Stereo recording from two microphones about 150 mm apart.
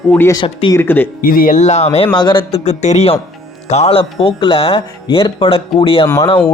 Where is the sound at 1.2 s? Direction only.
70° left (ahead or behind); by 1.9 s 50° left (ahead or behind).